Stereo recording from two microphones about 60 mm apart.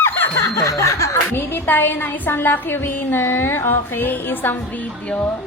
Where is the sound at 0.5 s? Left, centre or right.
Left.